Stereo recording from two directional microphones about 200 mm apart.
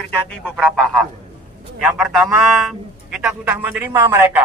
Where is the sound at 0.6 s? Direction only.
Centre (ahead or behind).